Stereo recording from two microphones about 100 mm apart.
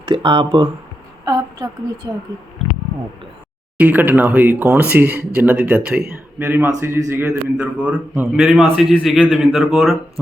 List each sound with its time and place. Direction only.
0.0 s speech: 55° right (ahead or behind)
1.2 s a sound: 40° right (ahead or behind)
3.8 s a man's voice: 15° right (ahead or behind)
8.4 s a man's voice: centre (ahead or behind)